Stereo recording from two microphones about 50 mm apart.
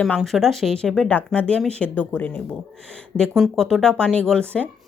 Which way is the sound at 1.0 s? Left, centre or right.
Left.